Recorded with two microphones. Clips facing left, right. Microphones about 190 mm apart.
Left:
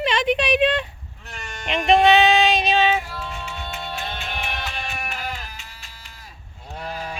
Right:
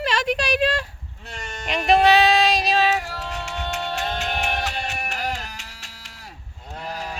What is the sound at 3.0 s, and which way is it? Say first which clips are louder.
Music: right 2 dB; 80° right.